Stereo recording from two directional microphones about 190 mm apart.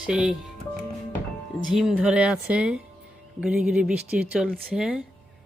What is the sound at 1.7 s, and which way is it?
A woman's voice, 5° right (ahead or behind).